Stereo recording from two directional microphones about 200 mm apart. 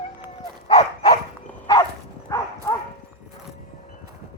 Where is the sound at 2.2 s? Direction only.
15° left (ahead or behind).